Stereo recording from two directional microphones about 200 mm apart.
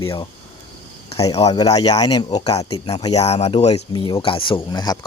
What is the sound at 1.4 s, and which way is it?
Speech, 20° left (ahead or behind).